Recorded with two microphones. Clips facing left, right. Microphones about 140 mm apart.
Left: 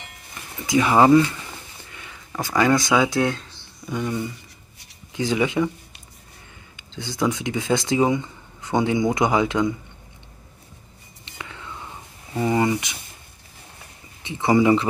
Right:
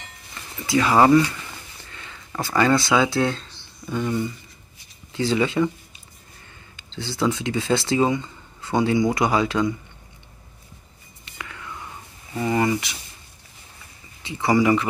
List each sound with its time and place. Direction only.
0.3 s a sound: 20° left (ahead or behind)
3.0 s speech: 15° left (ahead or behind)
6.8 s speech: 15° left (ahead or behind)
11.2 s whispering: 20° left (ahead or behind)
12.4 s speech: 15° left (ahead or behind)
14.2 s speech: 20° left (ahead or behind)